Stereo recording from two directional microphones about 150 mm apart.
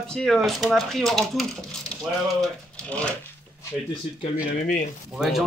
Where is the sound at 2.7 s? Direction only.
10° left (ahead or behind).